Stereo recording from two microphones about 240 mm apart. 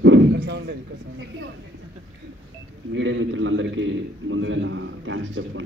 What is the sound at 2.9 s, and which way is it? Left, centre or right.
A man's voice, right.